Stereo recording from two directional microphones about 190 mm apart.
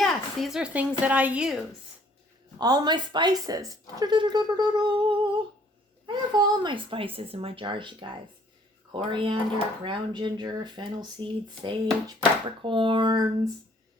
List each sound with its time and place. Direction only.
0.0 s a woman's voice: centre (ahead or behind)
2.6 s speech: 20° right (ahead or behind)